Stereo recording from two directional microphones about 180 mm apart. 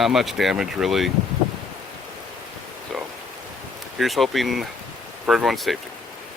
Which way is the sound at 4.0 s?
Centre (ahead or behind).